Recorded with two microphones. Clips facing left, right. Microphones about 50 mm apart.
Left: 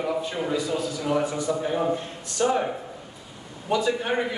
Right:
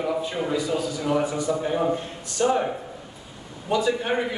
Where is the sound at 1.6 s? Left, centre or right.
Centre.